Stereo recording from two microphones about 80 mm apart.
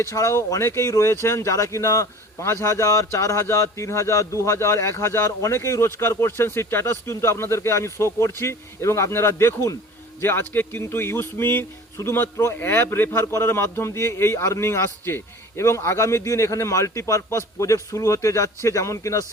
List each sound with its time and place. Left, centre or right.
0.0 s speech: left